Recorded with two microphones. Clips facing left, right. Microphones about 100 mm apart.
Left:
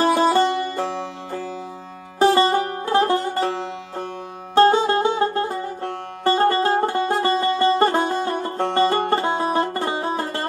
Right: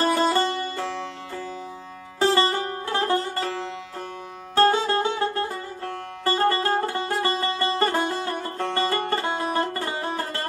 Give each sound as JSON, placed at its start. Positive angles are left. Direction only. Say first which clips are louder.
{"t": 0.0, "sound": "music", "louder": "left 4 dB", "side_deg": 20}